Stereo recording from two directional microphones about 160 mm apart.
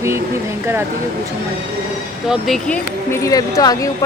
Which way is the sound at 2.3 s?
5° left (ahead or behind).